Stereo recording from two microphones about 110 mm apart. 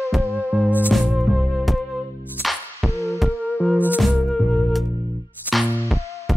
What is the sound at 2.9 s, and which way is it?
Music, 30° left (ahead or behind).